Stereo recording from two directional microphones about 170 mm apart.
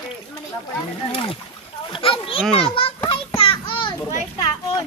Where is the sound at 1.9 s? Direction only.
30° left (ahead or behind).